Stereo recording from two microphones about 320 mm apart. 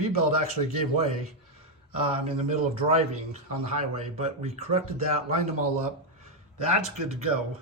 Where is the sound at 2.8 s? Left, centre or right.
Centre.